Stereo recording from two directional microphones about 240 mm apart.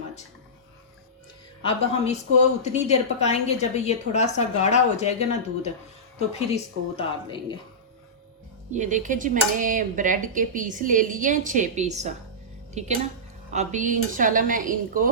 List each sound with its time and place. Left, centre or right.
1.6 s a woman's voice: left
6.1 s a woman's voice: left
8.7 s speech: right